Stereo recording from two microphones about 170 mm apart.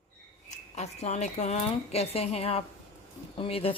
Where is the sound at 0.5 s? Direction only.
40° left (ahead or behind).